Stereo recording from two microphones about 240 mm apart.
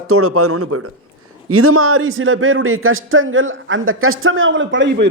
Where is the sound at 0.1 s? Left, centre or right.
Right.